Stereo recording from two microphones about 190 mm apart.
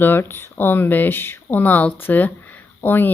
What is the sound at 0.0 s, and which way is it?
A woman's voice, 10° left (ahead or behind).